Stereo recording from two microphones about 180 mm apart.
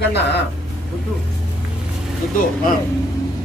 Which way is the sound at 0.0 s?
70° left (ahead or behind).